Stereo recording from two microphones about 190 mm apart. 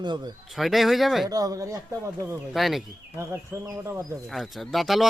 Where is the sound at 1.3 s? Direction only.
20° right (ahead or behind).